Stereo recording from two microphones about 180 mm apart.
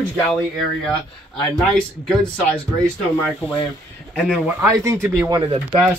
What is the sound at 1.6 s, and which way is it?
Speech, centre (ahead or behind).